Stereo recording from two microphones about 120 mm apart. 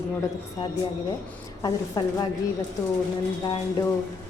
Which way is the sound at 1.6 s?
35° left (ahead or behind).